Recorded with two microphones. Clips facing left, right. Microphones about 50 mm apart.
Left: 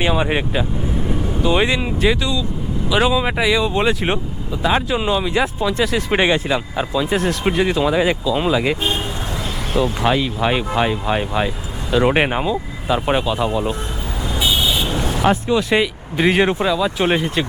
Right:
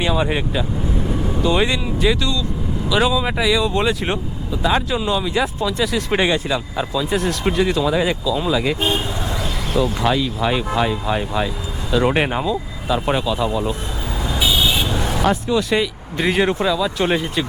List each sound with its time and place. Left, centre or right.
0.0 s speech: left
9.7 s speech: left
15.3 s speech: left